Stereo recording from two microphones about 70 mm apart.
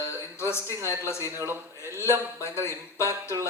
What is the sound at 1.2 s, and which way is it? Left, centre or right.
Speech, right.